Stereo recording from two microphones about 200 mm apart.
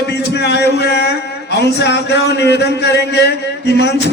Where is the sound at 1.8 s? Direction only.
55° left (ahead or behind).